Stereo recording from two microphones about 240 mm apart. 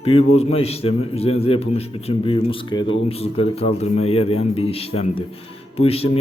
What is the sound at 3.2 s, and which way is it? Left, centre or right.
A man's voice, left.